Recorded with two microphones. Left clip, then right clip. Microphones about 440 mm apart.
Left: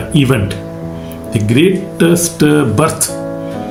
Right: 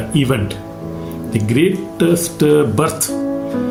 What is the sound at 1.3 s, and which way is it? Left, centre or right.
Speech, right.